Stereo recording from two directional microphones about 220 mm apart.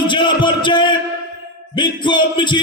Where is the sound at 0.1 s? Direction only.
20° left (ahead or behind).